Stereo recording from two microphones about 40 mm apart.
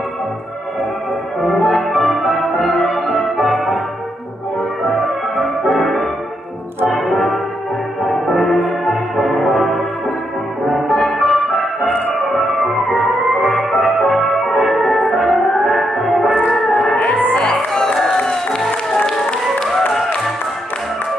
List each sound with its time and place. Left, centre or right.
1.4 s music: centre
4.8 s music: centre
10.9 s music: centre
16.4 s a sound: centre
16.9 s music: left